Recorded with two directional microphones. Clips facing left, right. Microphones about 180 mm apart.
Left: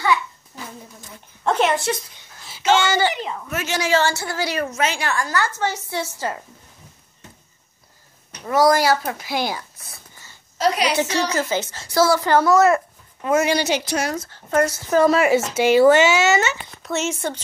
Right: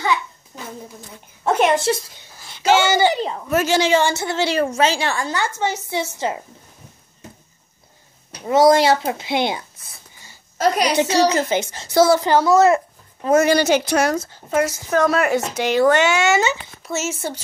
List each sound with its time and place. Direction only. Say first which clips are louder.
1.4 s speech: right 2 dB; 10° right (ahead or behind)
2.3 s child singing: even; centre (ahead or behind)
2.7 s speech: right 2 dB; 10° right (ahead or behind)
3.1 s a woman's voice: right 6 dB; 35° right (ahead or behind)
3.9 s a woman's voice: right 2 dB; 20° right (ahead or behind)
8.5 s a woman's voice: right 3 dB; 25° right (ahead or behind)
10.6 s speech: right 2 dB; 45° right (ahead or behind)
11.2 s a woman's voice: right 4 dB; 20° right (ahead or behind)
13.3 s speech: right 4 dB; 45° right (ahead or behind)
14.3 s speech: even; 10° right (ahead or behind)
14.9 s speech: left 3 dB; 5° left (ahead or behind)